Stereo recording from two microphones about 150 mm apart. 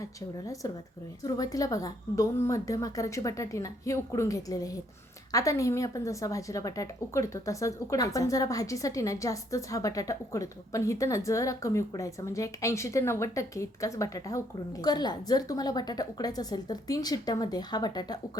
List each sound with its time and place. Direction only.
0.0 s a woman's voice: 20° left (ahead or behind)